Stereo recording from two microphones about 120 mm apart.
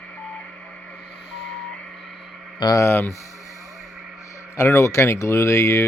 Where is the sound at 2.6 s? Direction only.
30° left (ahead or behind).